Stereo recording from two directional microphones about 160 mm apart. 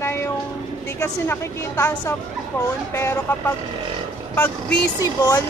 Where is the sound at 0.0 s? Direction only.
15° left (ahead or behind).